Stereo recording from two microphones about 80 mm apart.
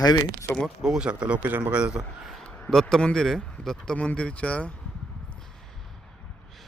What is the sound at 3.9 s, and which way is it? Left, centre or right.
Speech, centre.